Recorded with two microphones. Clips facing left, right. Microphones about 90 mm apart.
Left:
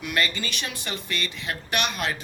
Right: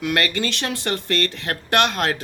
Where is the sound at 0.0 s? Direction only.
75° right (ahead or behind).